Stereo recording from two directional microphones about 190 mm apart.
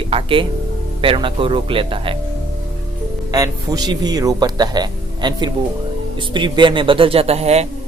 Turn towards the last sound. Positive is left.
turn(degrees=-35)  # may be behind; listen again after turning